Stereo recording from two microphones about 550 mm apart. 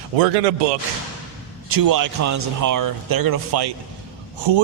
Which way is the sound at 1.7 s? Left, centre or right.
Right.